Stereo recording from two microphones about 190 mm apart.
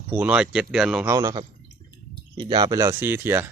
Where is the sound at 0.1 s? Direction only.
10° right (ahead or behind).